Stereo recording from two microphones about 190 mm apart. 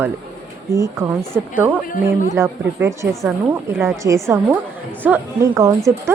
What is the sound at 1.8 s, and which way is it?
Speech, 45° left (ahead or behind).